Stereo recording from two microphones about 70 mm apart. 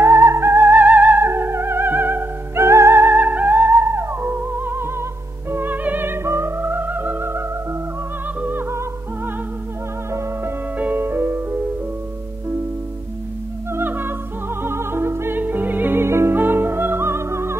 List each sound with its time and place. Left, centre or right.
0.0 s music: right
10.8 s music: right
13.7 s music: right